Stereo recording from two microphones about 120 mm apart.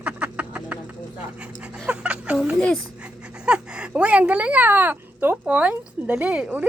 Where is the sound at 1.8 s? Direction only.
10° right (ahead or behind).